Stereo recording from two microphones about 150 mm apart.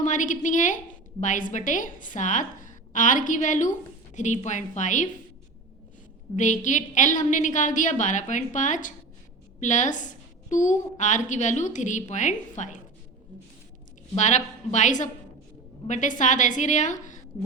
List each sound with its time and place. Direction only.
0.0 s a woman's voice: 55° left (ahead or behind)
6.3 s a woman's voice: 55° left (ahead or behind)
14.2 s a woman's voice: 55° left (ahead or behind)